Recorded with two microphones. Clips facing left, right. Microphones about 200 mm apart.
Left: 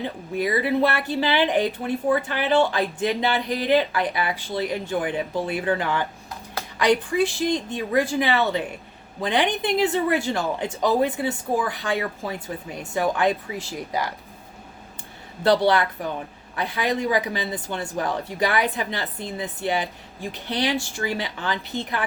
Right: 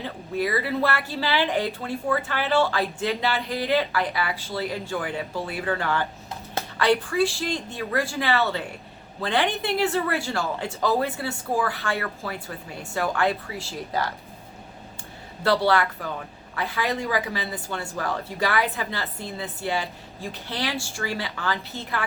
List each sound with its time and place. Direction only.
0.0 s speech: 20° left (ahead or behind)
15.4 s speech: 20° left (ahead or behind)